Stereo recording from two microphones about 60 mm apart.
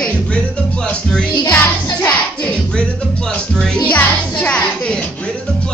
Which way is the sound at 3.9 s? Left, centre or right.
Left.